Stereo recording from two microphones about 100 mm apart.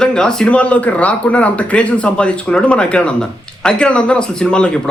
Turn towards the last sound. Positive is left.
turn(degrees=10)  # may be behind; listen again after turning